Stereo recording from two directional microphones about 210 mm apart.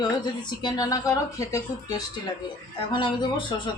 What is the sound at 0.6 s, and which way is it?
Speech, 15° left (ahead or behind).